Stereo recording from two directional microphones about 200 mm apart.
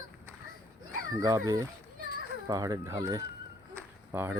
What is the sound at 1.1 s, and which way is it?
Speech, 15° right (ahead or behind).